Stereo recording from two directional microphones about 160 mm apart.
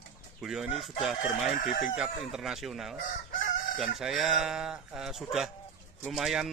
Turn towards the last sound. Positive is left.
turn(degrees=0)  # may be behind; listen again after turning